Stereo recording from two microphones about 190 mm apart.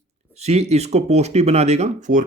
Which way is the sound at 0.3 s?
35° right (ahead or behind).